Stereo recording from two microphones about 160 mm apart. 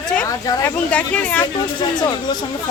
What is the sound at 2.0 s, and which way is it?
Speech, 25° left (ahead or behind).